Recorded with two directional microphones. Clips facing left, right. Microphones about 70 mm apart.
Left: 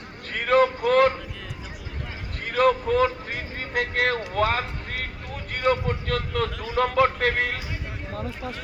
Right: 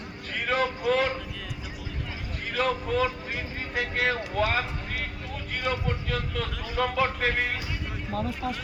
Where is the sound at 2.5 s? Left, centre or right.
Left.